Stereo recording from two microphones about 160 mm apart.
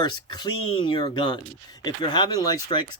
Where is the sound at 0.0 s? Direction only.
25° left (ahead or behind).